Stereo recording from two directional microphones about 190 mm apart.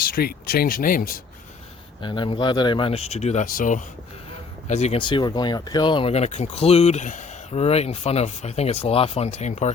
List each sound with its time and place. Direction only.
0.1 s speech: 55° left (ahead or behind)
2.0 s speech: 25° left (ahead or behind)